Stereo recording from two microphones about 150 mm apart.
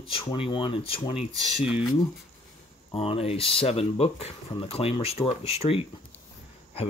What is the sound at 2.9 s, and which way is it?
Speech, 40° left (ahead or behind).